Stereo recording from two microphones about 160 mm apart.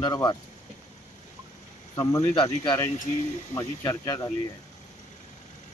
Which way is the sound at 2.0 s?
25° left (ahead or behind).